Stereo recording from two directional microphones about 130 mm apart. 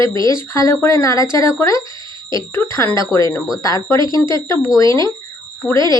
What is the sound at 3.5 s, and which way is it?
Speech, 30° left (ahead or behind).